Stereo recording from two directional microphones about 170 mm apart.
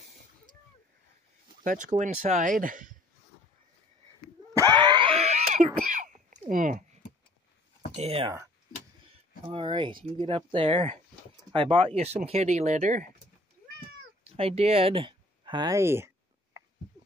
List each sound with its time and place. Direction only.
1.6 s speech: 50° right (ahead or behind)
4.6 s wheeze: 25° right (ahead or behind); by 5.7 s 45° right (ahead or behind)
5.8 s a sound: 50° right (ahead or behind)
6.5 s speech: 50° right (ahead or behind)
7.9 s speech: 40° right (ahead or behind)
9.5 s speech: 30° right (ahead or behind)
14.3 s speech: 35° right (ahead or behind); by 16.1 s 15° right (ahead or behind)